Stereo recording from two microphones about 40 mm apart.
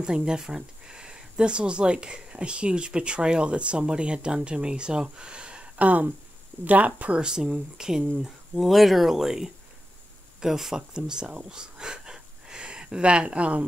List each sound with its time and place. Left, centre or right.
0.0 s speech: centre
5.8 s speech: right
7.2 s speech: centre
8.6 s speech: centre; by 13.7 s right